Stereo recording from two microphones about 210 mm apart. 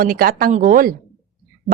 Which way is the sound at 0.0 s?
45° right (ahead or behind).